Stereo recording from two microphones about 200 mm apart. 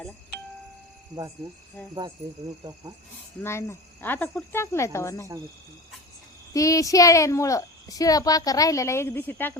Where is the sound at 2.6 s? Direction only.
20° right (ahead or behind).